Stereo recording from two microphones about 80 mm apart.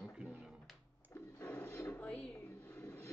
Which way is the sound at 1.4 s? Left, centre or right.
Left.